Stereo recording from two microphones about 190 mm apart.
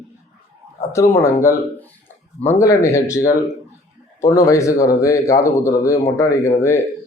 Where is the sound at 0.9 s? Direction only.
15° left (ahead or behind).